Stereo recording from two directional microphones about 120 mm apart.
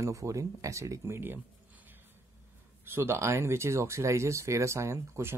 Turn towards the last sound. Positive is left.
turn(degrees=-20)  # may be behind; listen again after turning